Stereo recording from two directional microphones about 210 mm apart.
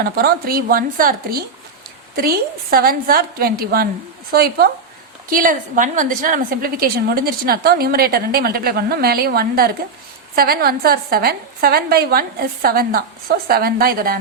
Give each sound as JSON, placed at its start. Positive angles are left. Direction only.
{"t": 0.0, "sound": "a woman's voice", "side_deg": -45}